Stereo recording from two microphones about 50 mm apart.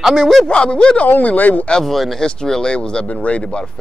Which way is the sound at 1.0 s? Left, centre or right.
Left.